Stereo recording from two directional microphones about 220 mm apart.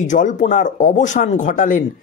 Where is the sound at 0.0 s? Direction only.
35° left (ahead or behind).